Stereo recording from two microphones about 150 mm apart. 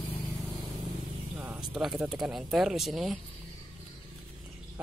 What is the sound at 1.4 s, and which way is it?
Speech, 10° right (ahead or behind).